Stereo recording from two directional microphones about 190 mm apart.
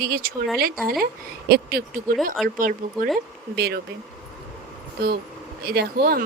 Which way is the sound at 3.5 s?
60° right (ahead or behind).